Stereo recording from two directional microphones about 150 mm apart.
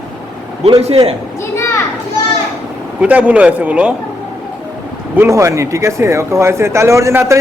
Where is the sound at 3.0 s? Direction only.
10° right (ahead or behind).